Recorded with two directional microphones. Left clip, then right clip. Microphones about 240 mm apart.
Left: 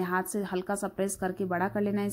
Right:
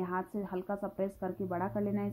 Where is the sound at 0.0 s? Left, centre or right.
Left.